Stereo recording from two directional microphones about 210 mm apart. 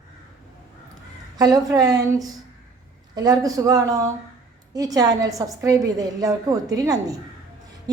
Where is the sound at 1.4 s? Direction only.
20° right (ahead or behind).